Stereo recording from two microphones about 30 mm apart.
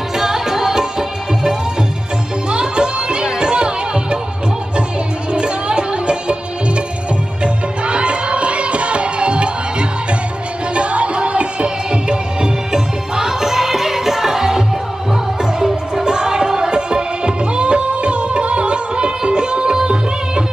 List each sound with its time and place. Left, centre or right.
0.2 s music: centre
2.5 s music: right
5.3 s music: right
7.4 s music: right; by 14.6 s centre
15.6 s music: right